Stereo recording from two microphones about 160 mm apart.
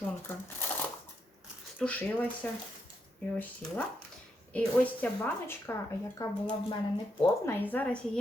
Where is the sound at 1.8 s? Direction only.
10° left (ahead or behind).